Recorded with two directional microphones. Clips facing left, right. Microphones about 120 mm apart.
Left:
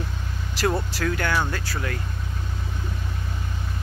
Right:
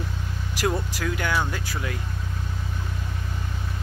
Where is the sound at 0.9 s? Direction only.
10° right (ahead or behind).